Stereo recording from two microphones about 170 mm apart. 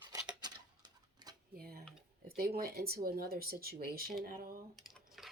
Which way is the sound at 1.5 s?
65° right (ahead or behind).